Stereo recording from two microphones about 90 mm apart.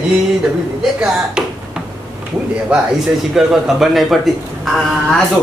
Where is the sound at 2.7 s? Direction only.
10° right (ahead or behind).